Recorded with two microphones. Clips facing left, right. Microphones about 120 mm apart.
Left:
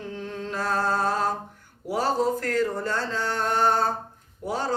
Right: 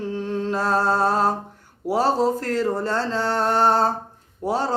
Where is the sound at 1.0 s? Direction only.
35° right (ahead or behind).